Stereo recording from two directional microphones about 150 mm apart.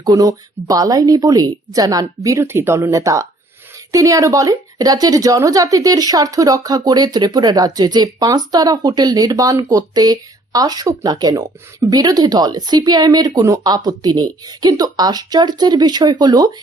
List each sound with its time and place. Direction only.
0.0 s a woman's voice: 25° right (ahead or behind)